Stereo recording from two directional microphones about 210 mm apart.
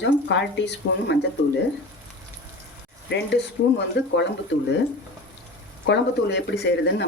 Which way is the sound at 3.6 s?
60° left (ahead or behind).